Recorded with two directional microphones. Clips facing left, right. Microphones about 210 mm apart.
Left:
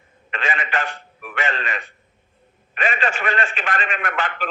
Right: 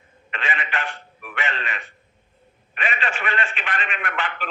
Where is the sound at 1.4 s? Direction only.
45° left (ahead or behind).